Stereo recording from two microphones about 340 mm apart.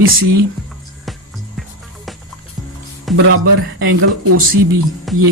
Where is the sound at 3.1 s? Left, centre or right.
Centre.